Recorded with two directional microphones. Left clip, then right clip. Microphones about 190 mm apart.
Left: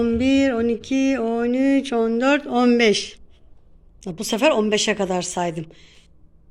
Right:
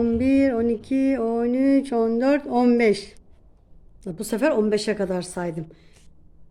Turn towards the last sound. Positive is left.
turn(degrees=-5)  # may be behind; listen again after turning